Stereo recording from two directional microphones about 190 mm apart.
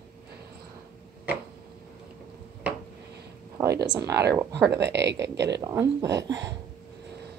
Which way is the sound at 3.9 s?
20° right (ahead or behind).